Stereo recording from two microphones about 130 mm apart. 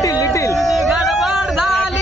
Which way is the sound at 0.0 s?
25° left (ahead or behind).